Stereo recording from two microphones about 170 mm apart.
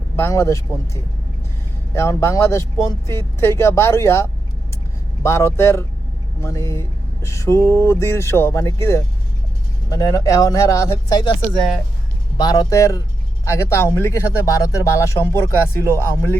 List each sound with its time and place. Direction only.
0.2 s speech: 15° left (ahead or behind)
12.4 s speech: 25° left (ahead or behind)